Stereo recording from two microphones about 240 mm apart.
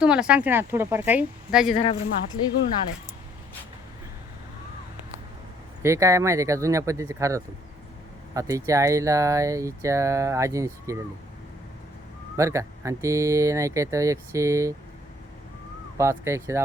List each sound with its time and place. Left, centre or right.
0.0 s a woman's voice: centre
1.7 s speech: left
5.8 s speech: centre
12.4 s speech: centre
16.0 s speech: centre